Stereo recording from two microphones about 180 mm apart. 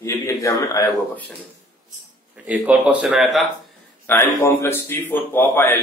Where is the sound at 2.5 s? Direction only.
10° right (ahead or behind).